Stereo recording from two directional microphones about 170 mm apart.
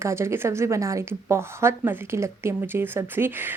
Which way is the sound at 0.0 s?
15° right (ahead or behind).